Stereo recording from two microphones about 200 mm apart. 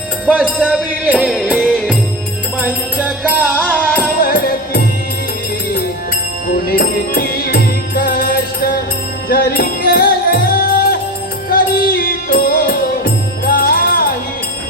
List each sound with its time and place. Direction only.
0.3 s music: 5° right (ahead or behind)
3.0 s music: 5° right (ahead or behind)
4.2 s music: 50° left (ahead or behind)
6.5 s music: 50° left (ahead or behind)